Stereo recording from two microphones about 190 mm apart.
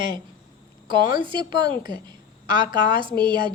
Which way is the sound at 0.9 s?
25° right (ahead or behind).